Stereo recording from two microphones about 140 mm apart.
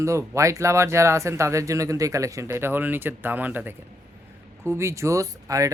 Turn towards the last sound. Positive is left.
turn(degrees=-25)  # may be behind; listen again after turning